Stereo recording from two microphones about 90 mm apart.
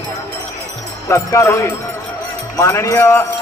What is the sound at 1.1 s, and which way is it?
Speech, 30° left (ahead or behind).